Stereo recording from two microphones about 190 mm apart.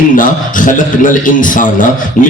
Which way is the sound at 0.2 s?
45° left (ahead or behind).